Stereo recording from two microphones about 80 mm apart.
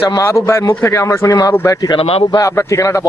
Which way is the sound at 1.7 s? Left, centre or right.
Left.